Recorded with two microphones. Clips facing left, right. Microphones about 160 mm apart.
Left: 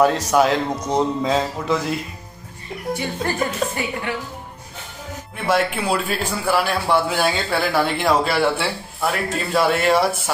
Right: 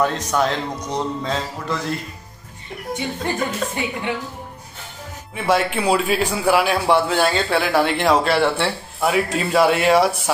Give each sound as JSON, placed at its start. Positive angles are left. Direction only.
{"t": 0.0, "sound": "a man's voice", "side_deg": 5}
{"t": 2.9, "sound": "a woman's voice", "side_deg": -20}
{"t": 5.3, "sound": "a man's voice", "side_deg": 0}